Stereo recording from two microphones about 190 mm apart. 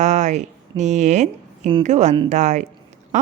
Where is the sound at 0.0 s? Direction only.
40° right (ahead or behind).